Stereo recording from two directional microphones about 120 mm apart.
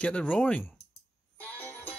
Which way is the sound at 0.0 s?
10° left (ahead or behind).